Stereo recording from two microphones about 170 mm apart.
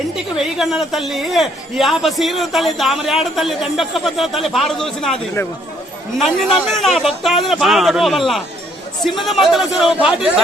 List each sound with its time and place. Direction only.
0.3 s a man's voice: 5° right (ahead or behind)